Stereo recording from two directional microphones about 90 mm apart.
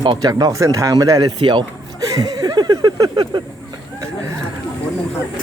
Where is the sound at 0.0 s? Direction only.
55° right (ahead or behind).